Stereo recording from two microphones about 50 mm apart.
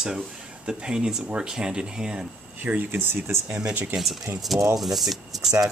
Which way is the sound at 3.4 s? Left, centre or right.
Right.